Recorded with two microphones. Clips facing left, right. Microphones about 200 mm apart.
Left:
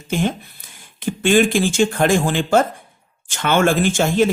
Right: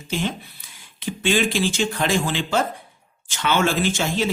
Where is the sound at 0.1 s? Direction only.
50° left (ahead or behind).